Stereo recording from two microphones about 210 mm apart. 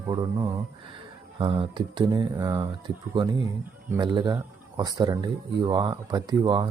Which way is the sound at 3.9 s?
20° right (ahead or behind).